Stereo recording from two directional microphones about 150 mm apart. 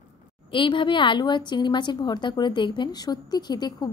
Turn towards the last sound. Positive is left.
turn(degrees=25)  # may be behind; listen again after turning